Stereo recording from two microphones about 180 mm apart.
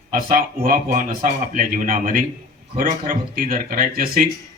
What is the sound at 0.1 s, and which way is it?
A man's voice, 50° right (ahead or behind).